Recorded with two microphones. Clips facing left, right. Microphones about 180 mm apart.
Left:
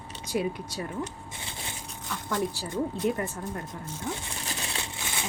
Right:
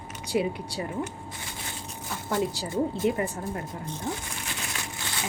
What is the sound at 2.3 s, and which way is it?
Speech, 5° right (ahead or behind).